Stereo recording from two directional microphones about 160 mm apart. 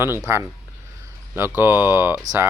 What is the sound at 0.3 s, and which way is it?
Speech, 15° right (ahead or behind).